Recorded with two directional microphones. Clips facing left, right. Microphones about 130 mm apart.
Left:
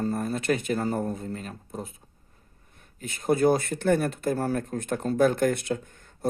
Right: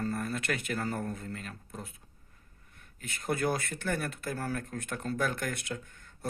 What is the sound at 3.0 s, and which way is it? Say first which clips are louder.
Speech: left 9 dB; 25° left (ahead or behind).